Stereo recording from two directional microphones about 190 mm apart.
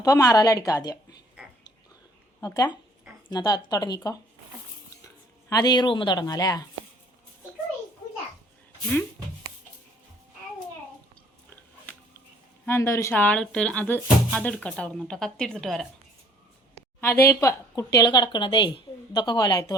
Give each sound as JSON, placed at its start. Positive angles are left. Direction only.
{"t": 0.0, "sound": "speech", "side_deg": 20}
{"t": 2.4, "sound": "speech", "side_deg": 20}
{"t": 12.6, "sound": "speech", "side_deg": 15}
{"t": 17.0, "sound": "speech", "side_deg": 10}